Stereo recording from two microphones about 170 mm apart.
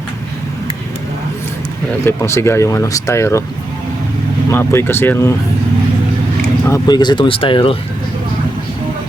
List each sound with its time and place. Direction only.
2.0 s speech: 15° left (ahead or behind)
4.4 s speech: 15° left (ahead or behind)
6.7 s speech: 20° left (ahead or behind)